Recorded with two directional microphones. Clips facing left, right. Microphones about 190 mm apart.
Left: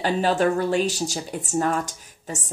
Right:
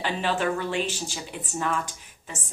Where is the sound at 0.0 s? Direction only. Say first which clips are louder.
Left 6 dB; 40° left (ahead or behind).